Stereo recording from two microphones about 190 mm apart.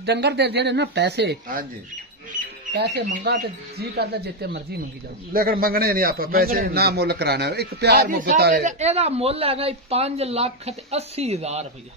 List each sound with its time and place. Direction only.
0.0 s speech: 60° right (ahead or behind)
2.7 s speech: 60° right (ahead or behind)
3.1 s a man's voice: 45° right (ahead or behind)
8.1 s a man's voice: 45° right (ahead or behind)
8.6 s speech: 35° right (ahead or behind)